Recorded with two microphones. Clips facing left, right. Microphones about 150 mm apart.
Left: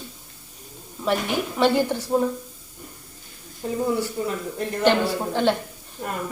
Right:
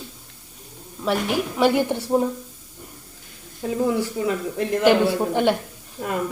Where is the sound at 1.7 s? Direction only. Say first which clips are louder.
Right 1 dB; 20° right (ahead or behind).